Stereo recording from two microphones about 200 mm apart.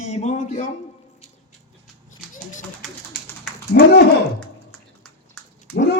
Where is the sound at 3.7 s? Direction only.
55° left (ahead or behind).